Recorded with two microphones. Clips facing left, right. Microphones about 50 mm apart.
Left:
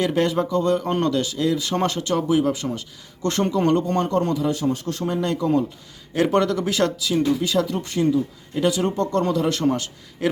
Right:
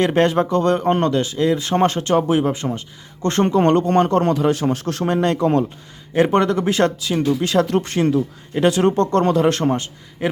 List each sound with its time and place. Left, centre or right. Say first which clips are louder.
0.0 s speech: right 4 dB; right
0.9 s a man's voice: right 3 dB; right
6.1 s speech: right 3 dB; right
7.4 s a man's voice: right 5 dB; right
8.5 s speech: right 5 dB; right
9.6 s a man's voice: right 1 dB; right